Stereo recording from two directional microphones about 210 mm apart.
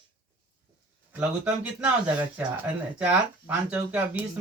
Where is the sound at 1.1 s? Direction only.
5° right (ahead or behind).